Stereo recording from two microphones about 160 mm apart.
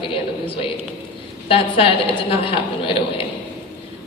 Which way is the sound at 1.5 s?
35° left (ahead or behind).